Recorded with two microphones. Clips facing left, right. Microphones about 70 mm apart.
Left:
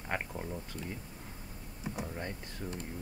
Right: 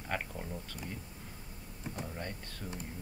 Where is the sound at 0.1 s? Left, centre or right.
Centre.